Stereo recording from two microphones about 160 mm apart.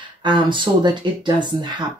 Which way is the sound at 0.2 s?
30° right (ahead or behind).